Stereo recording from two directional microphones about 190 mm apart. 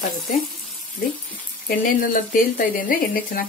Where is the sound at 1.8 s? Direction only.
45° left (ahead or behind).